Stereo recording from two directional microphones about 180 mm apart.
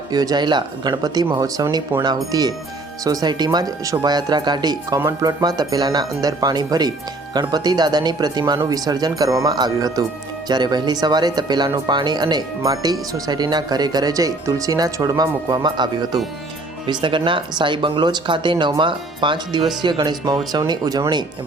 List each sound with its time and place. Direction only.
0.1 s speech: 20° right (ahead or behind)